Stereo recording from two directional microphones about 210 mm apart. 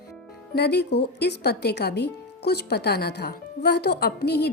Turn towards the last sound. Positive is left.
turn(degrees=50)  # may be behind; listen again after turning